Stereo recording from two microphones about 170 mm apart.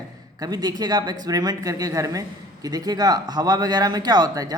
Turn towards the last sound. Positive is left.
turn(degrees=-20)  # may be behind; listen again after turning